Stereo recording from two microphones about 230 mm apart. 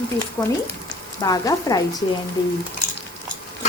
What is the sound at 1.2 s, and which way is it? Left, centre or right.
Speech, centre.